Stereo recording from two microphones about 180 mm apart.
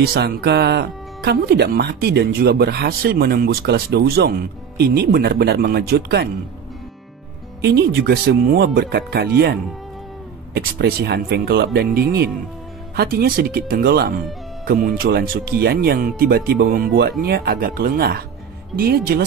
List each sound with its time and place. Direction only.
0.0 s speech: 60° right (ahead or behind)
7.6 s speech: 65° right (ahead or behind)